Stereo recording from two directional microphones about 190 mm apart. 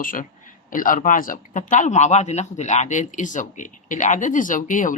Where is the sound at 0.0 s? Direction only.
45° left (ahead or behind).